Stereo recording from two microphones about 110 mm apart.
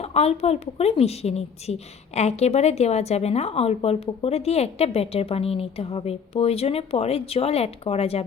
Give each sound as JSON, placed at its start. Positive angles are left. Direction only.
{"t": 0.0, "sound": "a woman's voice", "side_deg": 75}